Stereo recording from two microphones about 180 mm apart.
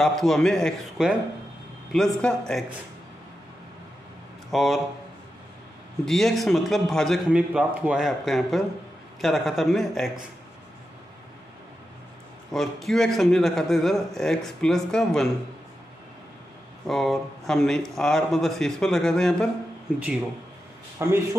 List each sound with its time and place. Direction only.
0.0 s a man's voice: centre (ahead or behind)
4.5 s a man's voice: centre (ahead or behind)
6.0 s a man's voice: centre (ahead or behind)
12.4 s a man's voice: centre (ahead or behind)
16.8 s a man's voice: centre (ahead or behind)
21.0 s speech: 15° right (ahead or behind)